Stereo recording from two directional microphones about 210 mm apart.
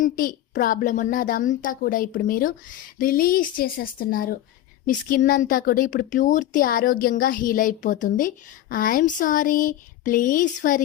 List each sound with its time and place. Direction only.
0.0 s speech: 40° left (ahead or behind)